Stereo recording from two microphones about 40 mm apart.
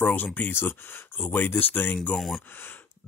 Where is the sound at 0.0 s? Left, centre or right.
Left.